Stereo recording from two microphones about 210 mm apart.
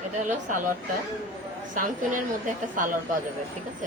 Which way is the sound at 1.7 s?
40° right (ahead or behind).